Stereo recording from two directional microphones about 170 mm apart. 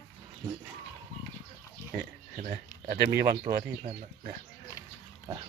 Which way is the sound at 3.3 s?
15° right (ahead or behind).